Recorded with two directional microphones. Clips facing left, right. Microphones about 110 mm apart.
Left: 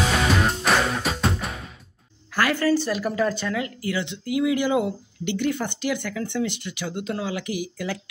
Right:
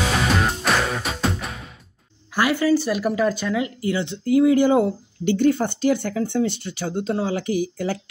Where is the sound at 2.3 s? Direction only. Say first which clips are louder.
Right 2 dB; 15° right (ahead or behind).